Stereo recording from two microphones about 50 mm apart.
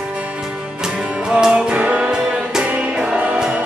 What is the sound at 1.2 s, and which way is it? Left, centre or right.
Music, centre.